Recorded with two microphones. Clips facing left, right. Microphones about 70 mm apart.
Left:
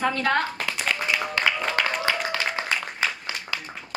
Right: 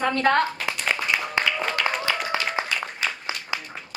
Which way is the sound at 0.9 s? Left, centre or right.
Right.